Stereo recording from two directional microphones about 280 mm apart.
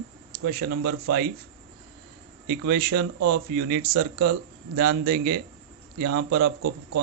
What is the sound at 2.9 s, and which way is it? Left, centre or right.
Speech, right.